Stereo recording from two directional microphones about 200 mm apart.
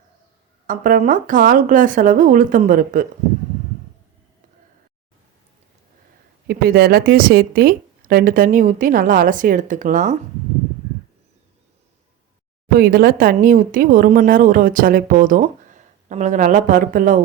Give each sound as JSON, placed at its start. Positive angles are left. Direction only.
{"t": 0.7, "sound": "speech", "side_deg": -40}
{"t": 6.5, "sound": "speech", "side_deg": -50}
{"t": 12.7, "sound": "speech", "side_deg": -50}